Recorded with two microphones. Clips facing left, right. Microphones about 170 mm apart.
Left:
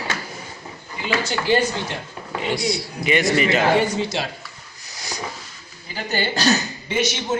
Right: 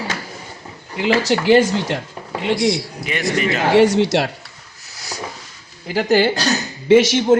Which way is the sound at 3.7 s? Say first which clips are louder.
Right 8 dB; 80° right.